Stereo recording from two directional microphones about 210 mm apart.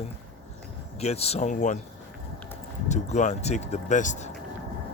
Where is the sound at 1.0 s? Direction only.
30° left (ahead or behind).